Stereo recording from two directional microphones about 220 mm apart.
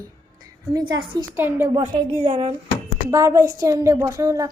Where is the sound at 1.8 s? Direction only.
20° right (ahead or behind).